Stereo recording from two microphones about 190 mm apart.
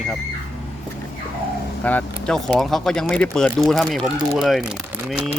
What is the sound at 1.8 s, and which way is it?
Speech, 10° left (ahead or behind).